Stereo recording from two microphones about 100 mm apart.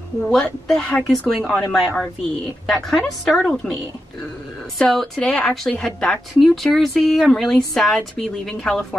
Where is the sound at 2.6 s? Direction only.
5° left (ahead or behind).